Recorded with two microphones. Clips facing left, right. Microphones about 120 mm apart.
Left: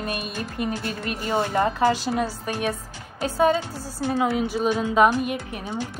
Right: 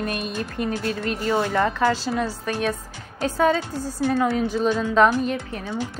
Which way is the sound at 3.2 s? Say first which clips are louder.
Even; 10° left (ahead or behind).